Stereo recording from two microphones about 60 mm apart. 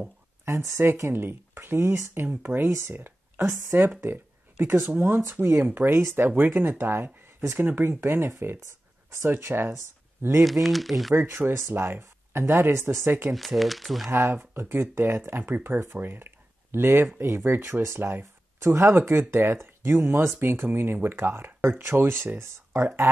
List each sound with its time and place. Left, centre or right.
0.7 s speech: right
5.9 s speech: right
10.4 s speech: centre
11.1 s speech: right
13.3 s speech: centre
14.1 s speech: right